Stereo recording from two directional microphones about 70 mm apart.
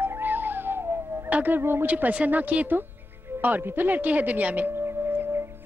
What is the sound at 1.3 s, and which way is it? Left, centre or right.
Speech, right.